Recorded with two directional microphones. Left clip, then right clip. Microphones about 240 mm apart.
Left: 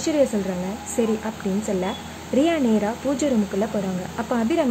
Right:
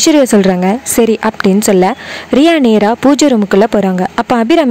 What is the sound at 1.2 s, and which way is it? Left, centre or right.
Speech, right.